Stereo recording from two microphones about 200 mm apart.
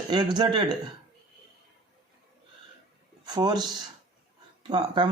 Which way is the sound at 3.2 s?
20° right (ahead or behind).